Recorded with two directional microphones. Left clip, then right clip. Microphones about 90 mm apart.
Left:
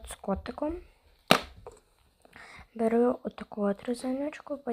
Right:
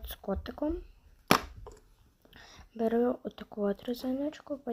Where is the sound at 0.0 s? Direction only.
5° right (ahead or behind).